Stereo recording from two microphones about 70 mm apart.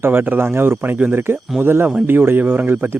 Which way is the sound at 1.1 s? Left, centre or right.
Right.